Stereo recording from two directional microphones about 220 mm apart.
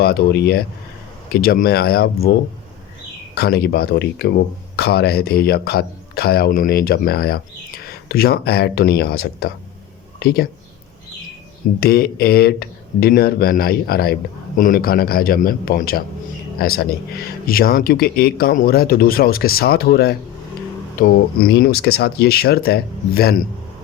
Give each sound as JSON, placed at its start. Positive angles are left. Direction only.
{"t": 0.0, "sound": "speech", "side_deg": 45}
{"t": 3.3, "sound": "speech", "side_deg": 45}
{"t": 11.8, "sound": "speech", "side_deg": 45}